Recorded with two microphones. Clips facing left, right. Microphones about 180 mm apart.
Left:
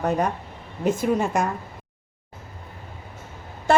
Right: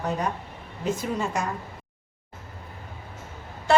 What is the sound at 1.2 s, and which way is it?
Speech, 55° left (ahead or behind).